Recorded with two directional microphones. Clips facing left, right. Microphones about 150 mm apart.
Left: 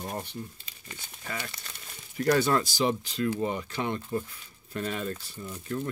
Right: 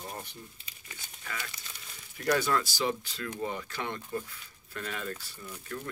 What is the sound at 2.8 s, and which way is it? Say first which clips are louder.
Speech: left 5 dB; 20° left (ahead or behind).